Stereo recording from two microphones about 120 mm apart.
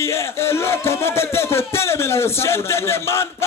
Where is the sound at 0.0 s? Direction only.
20° left (ahead or behind).